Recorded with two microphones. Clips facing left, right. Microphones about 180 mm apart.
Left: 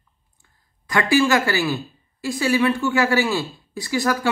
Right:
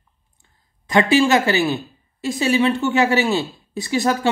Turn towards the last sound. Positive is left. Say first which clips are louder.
# right 2 dB
turn(degrees=-25)  # may be behind; listen again after turning